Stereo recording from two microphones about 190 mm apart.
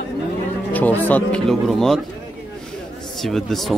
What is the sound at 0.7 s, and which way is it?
Speech, 10° left (ahead or behind).